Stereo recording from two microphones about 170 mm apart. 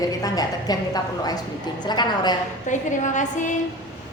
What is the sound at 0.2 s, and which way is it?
A woman's voice, 20° left (ahead or behind).